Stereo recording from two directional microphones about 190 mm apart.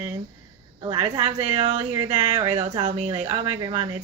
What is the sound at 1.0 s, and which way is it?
A woman's voice, 30° right (ahead or behind).